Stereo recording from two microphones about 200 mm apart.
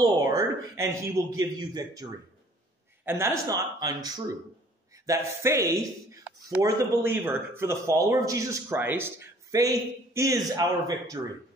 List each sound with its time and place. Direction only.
0.0 s speech: 15° right (ahead or behind)